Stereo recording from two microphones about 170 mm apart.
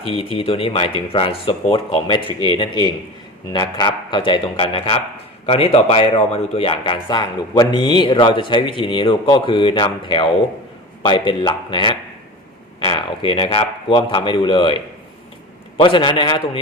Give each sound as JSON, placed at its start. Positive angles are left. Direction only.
{"t": 0.0, "sound": "speech", "side_deg": 35}
{"t": 15.8, "sound": "speech", "side_deg": 30}